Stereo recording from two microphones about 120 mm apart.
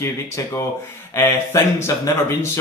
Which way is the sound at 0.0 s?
20° left (ahead or behind).